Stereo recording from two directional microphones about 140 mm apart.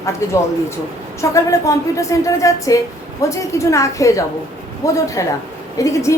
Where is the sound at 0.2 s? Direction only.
20° left (ahead or behind).